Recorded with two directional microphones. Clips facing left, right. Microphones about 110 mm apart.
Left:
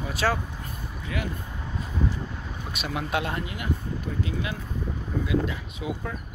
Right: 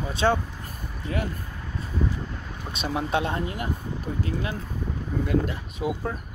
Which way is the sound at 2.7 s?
30° right (ahead or behind).